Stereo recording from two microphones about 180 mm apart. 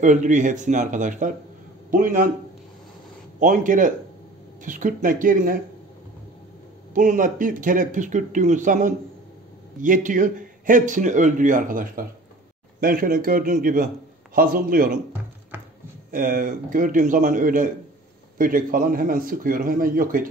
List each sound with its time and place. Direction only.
0.0 s speech: 45° right (ahead or behind)
3.3 s speech: 45° right (ahead or behind)
6.9 s speech: 45° right (ahead or behind)
15.5 s a sound: 10° right (ahead or behind)
16.1 s speech: 50° right (ahead or behind)